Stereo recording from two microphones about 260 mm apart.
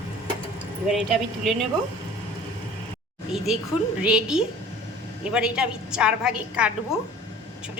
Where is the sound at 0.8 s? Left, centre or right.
Centre.